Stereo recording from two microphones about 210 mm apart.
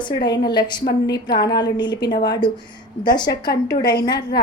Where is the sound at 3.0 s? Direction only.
20° left (ahead or behind).